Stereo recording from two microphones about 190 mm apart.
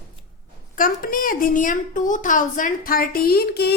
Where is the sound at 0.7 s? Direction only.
50° left (ahead or behind).